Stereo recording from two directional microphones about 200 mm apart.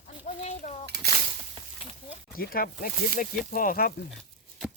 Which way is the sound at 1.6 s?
25° right (ahead or behind).